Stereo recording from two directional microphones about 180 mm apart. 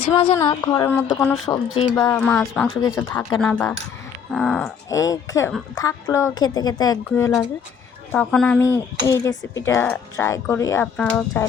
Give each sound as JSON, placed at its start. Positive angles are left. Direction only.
{"t": 0.1, "sound": "speech", "side_deg": 30}
{"t": 0.9, "sound": "speech", "side_deg": 10}
{"t": 1.5, "sound": "speech", "side_deg": 20}
{"t": 4.3, "sound": "a sound", "side_deg": 5}
{"t": 4.9, "sound": "speech", "side_deg": 20}